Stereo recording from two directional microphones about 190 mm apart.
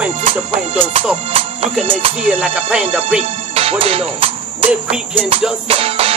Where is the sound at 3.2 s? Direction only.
30° right (ahead or behind).